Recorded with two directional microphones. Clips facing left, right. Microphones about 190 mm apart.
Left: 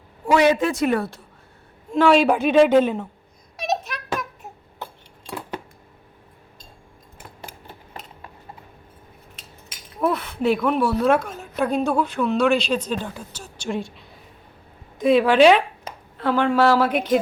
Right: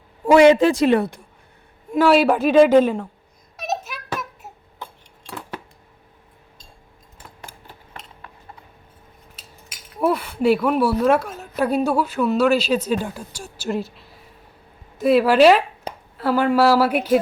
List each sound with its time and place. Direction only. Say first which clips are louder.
0.3 s a woman's voice: right 6 dB; 25° right (ahead or behind)
1.9 s a man's voice: right 1 dB; 5° right (ahead or behind)
3.6 s a sound: left 2 dB; 5° right (ahead or behind)
10.0 s a woman's voice: right 2 dB; 10° right (ahead or behind)